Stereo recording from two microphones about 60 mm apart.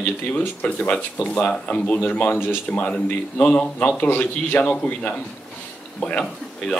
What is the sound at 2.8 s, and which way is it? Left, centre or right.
A man's voice, left.